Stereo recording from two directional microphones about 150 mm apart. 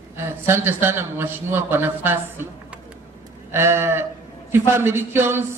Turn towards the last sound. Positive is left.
turn(degrees=-15)  # may be behind; listen again after turning